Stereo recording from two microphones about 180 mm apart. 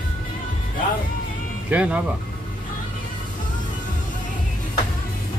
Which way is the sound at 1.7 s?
5° right (ahead or behind).